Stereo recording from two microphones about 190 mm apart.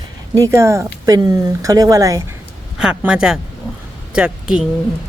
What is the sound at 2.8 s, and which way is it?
Speech, 5° right (ahead or behind).